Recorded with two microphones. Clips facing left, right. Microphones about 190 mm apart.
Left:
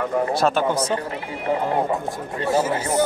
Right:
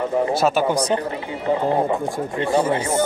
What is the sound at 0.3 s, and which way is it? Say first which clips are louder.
Speech: right 1 dB; 5° right (ahead or behind).